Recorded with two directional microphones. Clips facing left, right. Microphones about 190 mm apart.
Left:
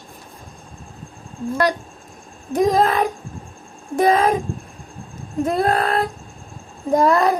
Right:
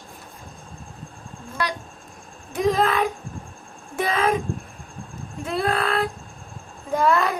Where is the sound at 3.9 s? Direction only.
40° left (ahead or behind).